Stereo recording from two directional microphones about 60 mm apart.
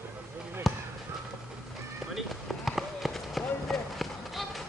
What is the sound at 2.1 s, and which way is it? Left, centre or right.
Run, centre.